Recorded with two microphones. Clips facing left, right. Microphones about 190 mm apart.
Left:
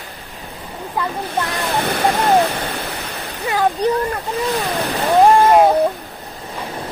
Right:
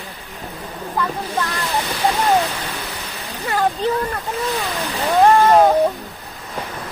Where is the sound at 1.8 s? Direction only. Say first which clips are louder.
Left 2 dB; 55° left (ahead or behind).